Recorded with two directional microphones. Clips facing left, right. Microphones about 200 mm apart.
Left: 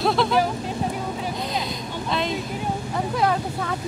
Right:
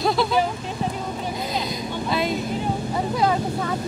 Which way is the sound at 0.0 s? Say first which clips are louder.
Even; centre (ahead or behind).